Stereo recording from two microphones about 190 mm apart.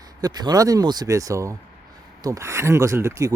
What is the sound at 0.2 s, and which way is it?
Speech, 20° right (ahead or behind).